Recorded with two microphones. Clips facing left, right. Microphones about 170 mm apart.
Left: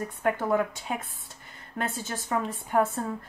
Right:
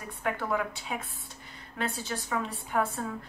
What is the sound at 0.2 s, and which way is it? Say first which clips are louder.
Speech: left 5 dB; 45° left (ahead or behind).